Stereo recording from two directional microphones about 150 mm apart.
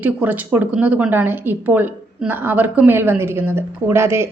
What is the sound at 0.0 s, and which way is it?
Speech, 10° right (ahead or behind).